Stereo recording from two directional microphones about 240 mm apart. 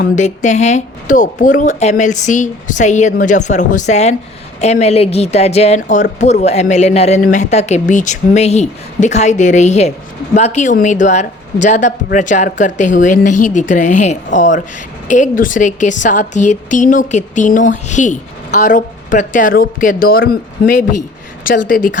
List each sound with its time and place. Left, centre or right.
0.0 s a woman's voice: left